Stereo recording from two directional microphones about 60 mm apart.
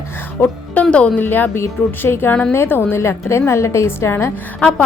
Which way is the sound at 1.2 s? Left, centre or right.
Left.